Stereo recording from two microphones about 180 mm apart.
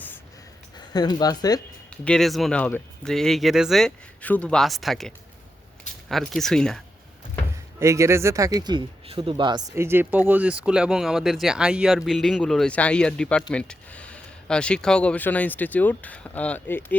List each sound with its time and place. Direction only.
0.9 s speech: 20° left (ahead or behind)
2.0 s speech: centre (ahead or behind)
7.8 s speech: 15° right (ahead or behind); by 16.8 s 10° left (ahead or behind)